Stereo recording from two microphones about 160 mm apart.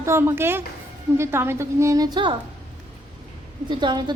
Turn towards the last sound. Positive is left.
turn(degrees=-30)  # may be behind; listen again after turning